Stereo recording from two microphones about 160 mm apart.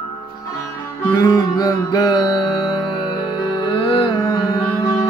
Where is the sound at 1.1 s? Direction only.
20° left (ahead or behind).